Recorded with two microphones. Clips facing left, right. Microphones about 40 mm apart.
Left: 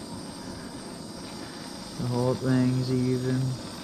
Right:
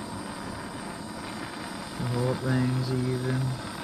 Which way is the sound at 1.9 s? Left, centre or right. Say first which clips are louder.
Left 2 dB; right.